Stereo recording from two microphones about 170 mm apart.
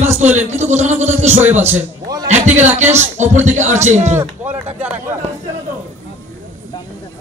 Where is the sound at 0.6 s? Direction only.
45° right (ahead or behind).